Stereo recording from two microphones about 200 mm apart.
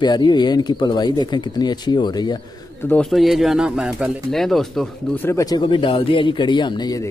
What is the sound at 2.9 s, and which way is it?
Speech, centre (ahead or behind).